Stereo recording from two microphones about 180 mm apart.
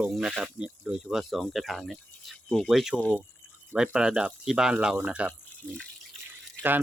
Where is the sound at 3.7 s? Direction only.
5° right (ahead or behind).